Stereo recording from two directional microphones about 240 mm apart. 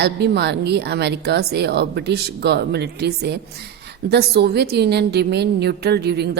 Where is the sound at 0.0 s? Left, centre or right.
Right.